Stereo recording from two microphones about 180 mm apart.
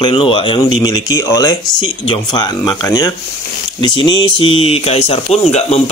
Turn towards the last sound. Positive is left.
turn(degrees=40)  # may be behind; listen again after turning